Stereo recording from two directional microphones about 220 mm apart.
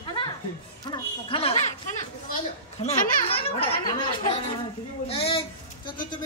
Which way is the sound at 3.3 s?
25° left (ahead or behind).